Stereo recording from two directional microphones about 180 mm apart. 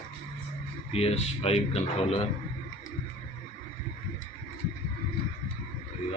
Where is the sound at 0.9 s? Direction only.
35° left (ahead or behind).